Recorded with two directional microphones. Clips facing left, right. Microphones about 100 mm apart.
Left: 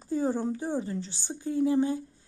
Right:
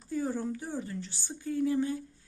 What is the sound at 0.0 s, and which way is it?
A woman's voice, 25° left (ahead or behind).